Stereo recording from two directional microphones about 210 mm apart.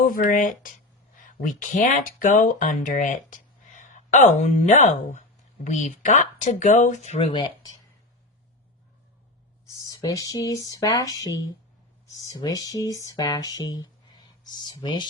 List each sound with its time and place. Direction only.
0.0 s speech: 40° left (ahead or behind); by 7.8 s 20° left (ahead or behind)
10.1 s speech: 15° left (ahead or behind)